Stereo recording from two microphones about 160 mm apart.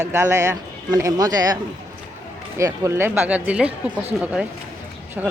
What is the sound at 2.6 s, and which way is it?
Speech, 20° right (ahead or behind).